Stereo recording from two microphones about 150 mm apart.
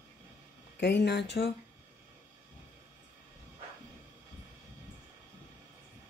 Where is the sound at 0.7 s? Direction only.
90° left.